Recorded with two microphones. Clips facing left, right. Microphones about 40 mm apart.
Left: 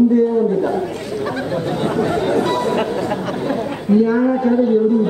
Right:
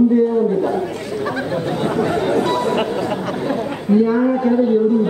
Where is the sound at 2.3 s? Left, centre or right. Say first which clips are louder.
Even; centre.